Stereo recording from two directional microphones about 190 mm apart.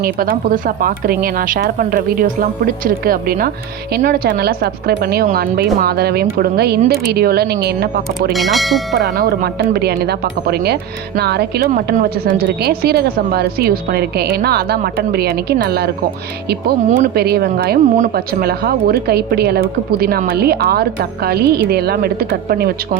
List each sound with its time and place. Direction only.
0.0 s a woman's voice: 50° right (ahead or behind)
8.3 s speech: centre (ahead or behind)
9.1 s a woman's voice: 55° right (ahead or behind)